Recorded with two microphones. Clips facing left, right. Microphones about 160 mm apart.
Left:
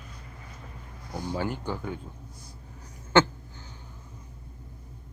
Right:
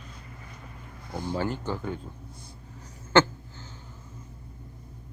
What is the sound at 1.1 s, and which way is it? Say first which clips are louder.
Speech: right 1 dB; 25° right (ahead or behind).